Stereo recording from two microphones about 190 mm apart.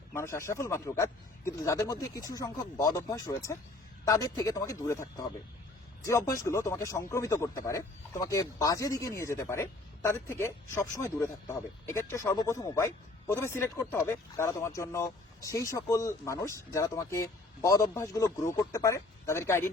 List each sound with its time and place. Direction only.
0.1 s speech: 15° left (ahead or behind)